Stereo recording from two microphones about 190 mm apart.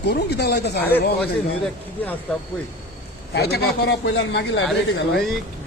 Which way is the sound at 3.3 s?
60° left (ahead or behind).